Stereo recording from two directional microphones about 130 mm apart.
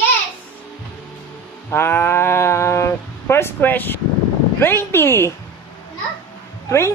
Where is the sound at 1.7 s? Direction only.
20° left (ahead or behind).